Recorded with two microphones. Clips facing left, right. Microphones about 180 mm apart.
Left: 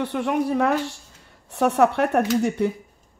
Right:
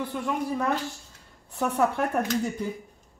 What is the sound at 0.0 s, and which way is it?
A woman's voice, 75° left (ahead or behind).